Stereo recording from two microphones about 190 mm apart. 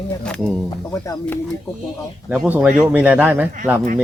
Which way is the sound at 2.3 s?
5° right (ahead or behind).